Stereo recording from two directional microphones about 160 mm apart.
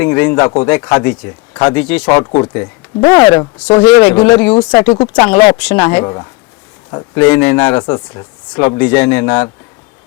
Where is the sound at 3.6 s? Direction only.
5° left (ahead or behind).